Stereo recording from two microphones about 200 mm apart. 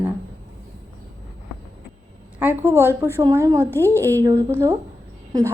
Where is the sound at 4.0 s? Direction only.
15° right (ahead or behind).